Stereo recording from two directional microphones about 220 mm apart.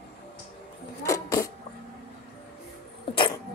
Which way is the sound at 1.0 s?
15° left (ahead or behind).